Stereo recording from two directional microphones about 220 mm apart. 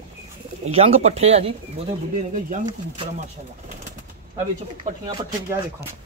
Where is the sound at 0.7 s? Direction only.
25° right (ahead or behind).